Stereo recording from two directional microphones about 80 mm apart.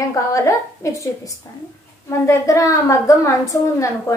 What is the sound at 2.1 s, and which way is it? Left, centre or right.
Speech, left.